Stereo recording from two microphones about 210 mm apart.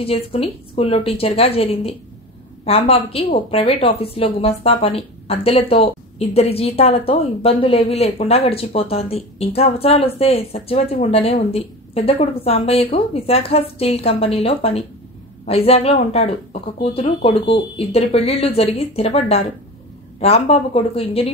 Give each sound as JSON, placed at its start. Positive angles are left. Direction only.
{"t": 0.0, "sound": "a woman's voice", "side_deg": 30}